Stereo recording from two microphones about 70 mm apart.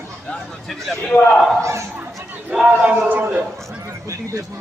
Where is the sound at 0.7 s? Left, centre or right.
Centre.